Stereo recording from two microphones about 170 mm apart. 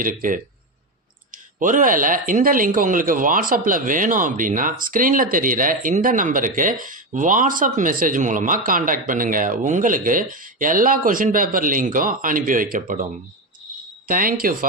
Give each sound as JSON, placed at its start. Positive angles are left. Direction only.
{"t": 0.0, "sound": "speech", "side_deg": -55}
{"t": 1.5, "sound": "speech", "side_deg": -50}
{"t": 14.1, "sound": "speech", "side_deg": -55}